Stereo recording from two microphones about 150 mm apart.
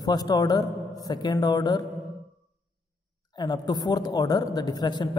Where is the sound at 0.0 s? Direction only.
25° left (ahead or behind).